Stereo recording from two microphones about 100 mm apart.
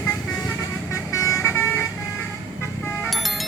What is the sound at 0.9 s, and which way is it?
Vehicle, 30° left (ahead or behind).